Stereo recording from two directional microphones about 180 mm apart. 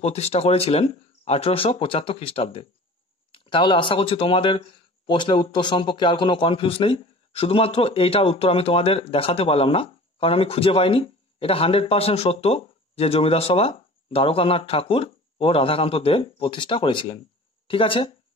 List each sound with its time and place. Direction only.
0.0 s speech: 35° left (ahead or behind)